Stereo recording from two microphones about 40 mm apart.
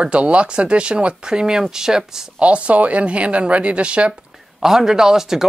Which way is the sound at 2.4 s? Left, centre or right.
Right.